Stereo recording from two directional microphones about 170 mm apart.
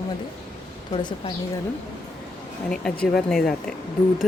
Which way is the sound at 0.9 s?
25° left (ahead or behind).